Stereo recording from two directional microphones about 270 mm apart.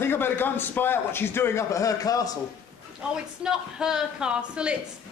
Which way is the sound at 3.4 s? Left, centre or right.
Centre.